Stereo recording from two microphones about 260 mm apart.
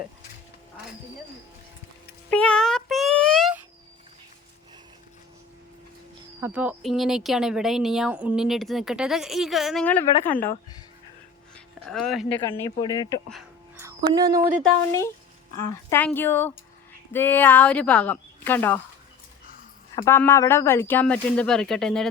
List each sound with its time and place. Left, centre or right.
2.3 s a sound: centre
6.4 s speech: centre
11.5 s music: centre
12.5 s speech: centre
13.3 s music: centre
15.9 s speech: centre
20.0 s speech: centre